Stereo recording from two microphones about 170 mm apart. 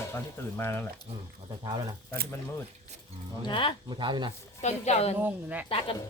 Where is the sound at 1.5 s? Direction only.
25° right (ahead or behind).